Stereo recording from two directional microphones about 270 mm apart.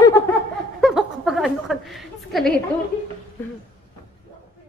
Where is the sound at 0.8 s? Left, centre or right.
Centre.